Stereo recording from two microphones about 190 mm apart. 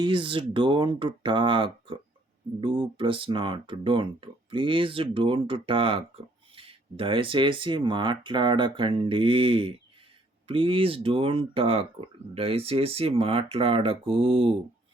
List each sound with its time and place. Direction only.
0.0 s speech: 25° right (ahead or behind)